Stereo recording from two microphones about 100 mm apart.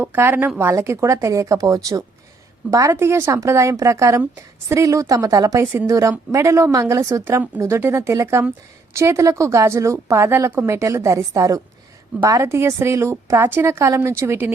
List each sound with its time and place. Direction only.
0.0 s a woman's voice: 20° right (ahead or behind)